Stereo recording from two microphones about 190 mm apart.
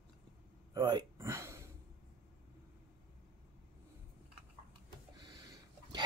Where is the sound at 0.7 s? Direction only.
20° right (ahead or behind).